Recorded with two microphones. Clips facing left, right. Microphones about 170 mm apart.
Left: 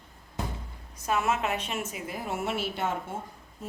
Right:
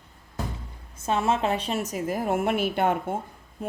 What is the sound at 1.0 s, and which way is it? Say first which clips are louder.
A woman's voice: right 4 dB; 30° right (ahead or behind).